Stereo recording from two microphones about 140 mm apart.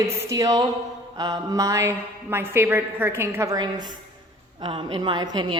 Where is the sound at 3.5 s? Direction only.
30° right (ahead or behind).